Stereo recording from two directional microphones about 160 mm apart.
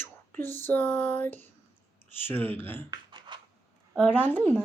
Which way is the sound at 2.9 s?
30° right (ahead or behind).